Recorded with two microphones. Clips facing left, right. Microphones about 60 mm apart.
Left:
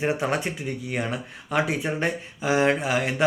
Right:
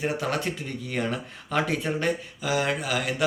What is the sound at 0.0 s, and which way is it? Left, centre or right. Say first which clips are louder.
Speech: left 2 dB; left.